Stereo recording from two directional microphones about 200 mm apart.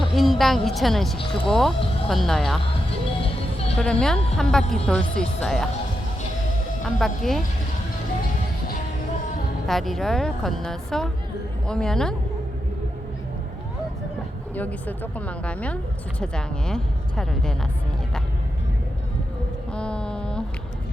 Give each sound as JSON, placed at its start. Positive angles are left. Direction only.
{"t": 0.0, "sound": "a woman's voice", "side_deg": 0}
{"t": 3.2, "sound": "music", "side_deg": 30}
{"t": 3.8, "sound": "a woman's voice", "side_deg": 5}
{"t": 6.8, "sound": "a woman's voice", "side_deg": 0}
{"t": 9.6, "sound": "a woman's voice", "side_deg": 0}
{"t": 14.5, "sound": "a woman's voice", "side_deg": 10}
{"t": 19.7, "sound": "a sound", "side_deg": 5}